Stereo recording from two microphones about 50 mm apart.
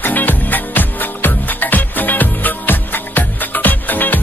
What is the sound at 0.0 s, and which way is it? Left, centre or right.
Music, left.